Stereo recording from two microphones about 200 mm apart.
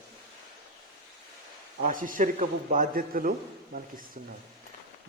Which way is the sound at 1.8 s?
40° right (ahead or behind).